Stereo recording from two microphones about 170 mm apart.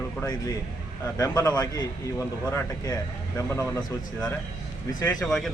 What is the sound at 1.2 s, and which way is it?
A man's voice, 20° left (ahead or behind).